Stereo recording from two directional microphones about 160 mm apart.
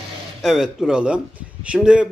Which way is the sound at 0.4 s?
Centre (ahead or behind).